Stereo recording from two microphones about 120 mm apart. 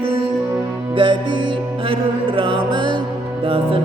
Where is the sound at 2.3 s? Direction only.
45° right (ahead or behind).